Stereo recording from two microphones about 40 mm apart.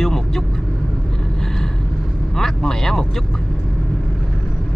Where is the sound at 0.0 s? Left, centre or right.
Centre.